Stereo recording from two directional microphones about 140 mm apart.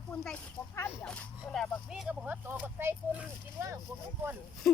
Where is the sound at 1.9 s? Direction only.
5° right (ahead or behind).